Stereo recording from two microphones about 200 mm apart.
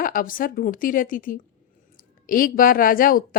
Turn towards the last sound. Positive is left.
turn(degrees=45)  # may be behind; listen again after turning